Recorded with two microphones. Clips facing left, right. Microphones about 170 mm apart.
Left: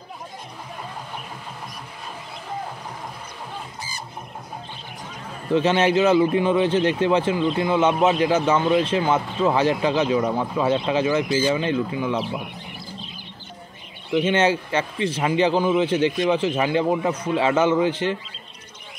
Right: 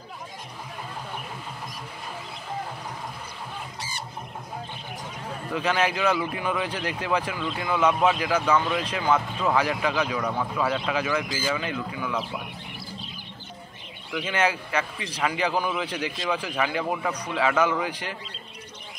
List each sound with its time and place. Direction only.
5.5 s a man's voice: 25° left (ahead or behind)
14.1 s a man's voice: 25° left (ahead or behind)